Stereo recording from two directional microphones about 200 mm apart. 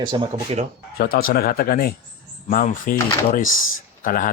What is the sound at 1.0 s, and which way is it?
Speech, 50° left (ahead or behind).